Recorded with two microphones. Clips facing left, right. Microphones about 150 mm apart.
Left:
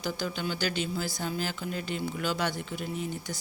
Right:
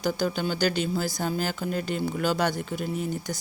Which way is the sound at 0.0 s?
40° right (ahead or behind).